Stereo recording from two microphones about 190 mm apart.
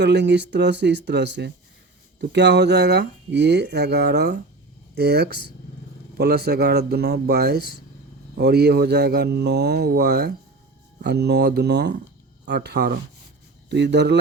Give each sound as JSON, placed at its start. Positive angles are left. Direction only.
{"t": 0.0, "sound": "speech", "side_deg": -65}